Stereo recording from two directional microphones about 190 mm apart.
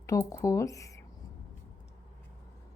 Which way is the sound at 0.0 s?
15° left (ahead or behind).